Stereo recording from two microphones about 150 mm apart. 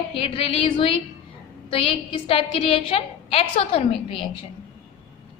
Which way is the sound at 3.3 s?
40° left (ahead or behind).